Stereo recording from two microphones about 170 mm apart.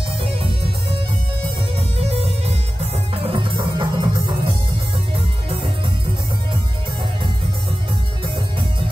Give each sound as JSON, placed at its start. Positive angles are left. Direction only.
{"t": 2.0, "sound": "music", "side_deg": -35}
{"t": 8.2, "sound": "music", "side_deg": -30}